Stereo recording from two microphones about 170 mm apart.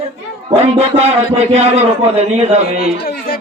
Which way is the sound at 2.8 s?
60° left (ahead or behind).